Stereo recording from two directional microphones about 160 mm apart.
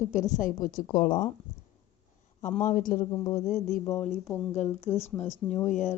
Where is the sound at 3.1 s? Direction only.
25° left (ahead or behind).